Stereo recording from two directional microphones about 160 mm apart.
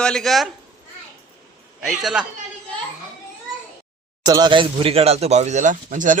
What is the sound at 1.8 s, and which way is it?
Speech, 5° right (ahead or behind).